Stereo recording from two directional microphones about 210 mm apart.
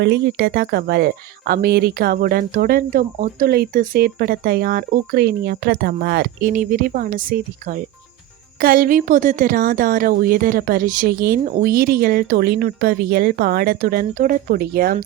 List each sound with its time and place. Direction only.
0.0 s speech: 55° right (ahead or behind)